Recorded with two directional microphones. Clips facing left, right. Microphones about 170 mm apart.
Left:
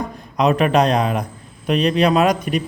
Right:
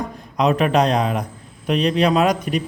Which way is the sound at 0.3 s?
60° left (ahead or behind).